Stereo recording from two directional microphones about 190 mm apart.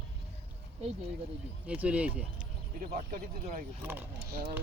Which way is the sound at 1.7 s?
5° right (ahead or behind).